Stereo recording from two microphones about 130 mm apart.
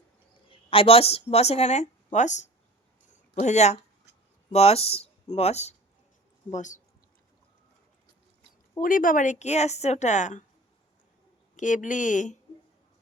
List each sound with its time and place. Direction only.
0.5 s speech: 45° left (ahead or behind); by 2.5 s 65° left (ahead or behind)
3.1 s a sound: 70° left (ahead or behind)
4.5 s speech: 50° left (ahead or behind)
6.5 s a woman's voice: 70° left (ahead or behind)
8.8 s a woman's voice: 90° left; by 10.4 s 65° left (ahead or behind)
11.5 s a woman's voice: 75° left (ahead or behind)